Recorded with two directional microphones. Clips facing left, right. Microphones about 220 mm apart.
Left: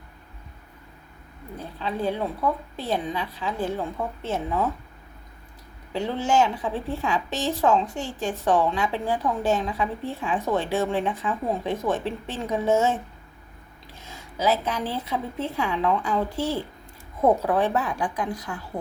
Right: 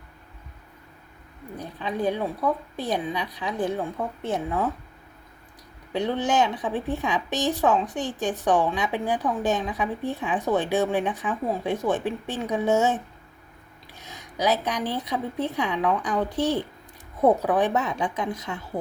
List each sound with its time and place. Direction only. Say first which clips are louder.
1.5 s a woman's voice: right 1 dB; 15° right (ahead or behind)
5.9 s a woman's voice: even; 20° right (ahead or behind)
14.0 s a woman's voice: even; 15° right (ahead or behind)